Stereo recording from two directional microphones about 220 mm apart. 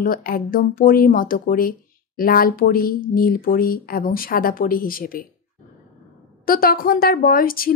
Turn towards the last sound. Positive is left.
turn(degrees=40)  # may be behind; listen again after turning